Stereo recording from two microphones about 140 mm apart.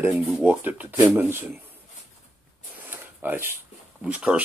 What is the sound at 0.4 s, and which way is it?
Speech, 10° right (ahead or behind).